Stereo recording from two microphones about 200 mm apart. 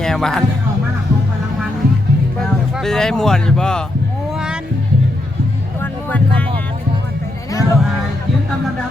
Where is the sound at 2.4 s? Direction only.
Centre (ahead or behind).